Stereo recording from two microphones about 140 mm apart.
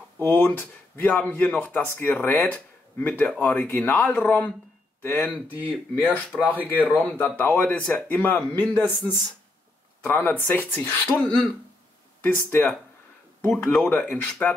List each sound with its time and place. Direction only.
0.2 s speech: 15° left (ahead or behind)
5.5 s speech: 10° right (ahead or behind)
7.2 s speech: 15° left (ahead or behind)